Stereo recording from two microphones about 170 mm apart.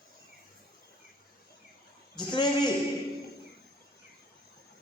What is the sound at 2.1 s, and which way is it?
Speech, 25° left (ahead or behind).